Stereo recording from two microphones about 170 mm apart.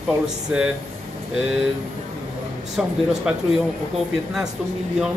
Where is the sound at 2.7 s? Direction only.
Centre (ahead or behind).